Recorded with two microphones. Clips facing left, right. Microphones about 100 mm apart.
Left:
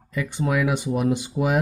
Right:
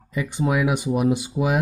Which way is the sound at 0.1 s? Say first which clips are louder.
Right 1 dB; 15° right (ahead or behind).